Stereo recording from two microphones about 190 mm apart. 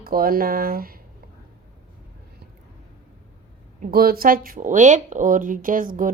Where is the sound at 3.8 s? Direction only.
50° right (ahead or behind).